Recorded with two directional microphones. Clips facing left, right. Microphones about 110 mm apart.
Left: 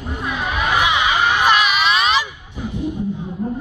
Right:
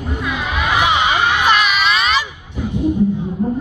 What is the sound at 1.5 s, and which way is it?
Crowd, 10° left (ahead or behind).